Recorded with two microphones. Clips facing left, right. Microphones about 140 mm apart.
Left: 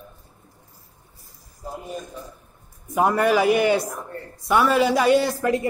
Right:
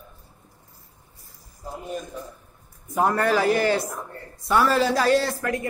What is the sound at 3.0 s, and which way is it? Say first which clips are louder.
A man's voice: left 2 dB; 10° left (ahead or behind).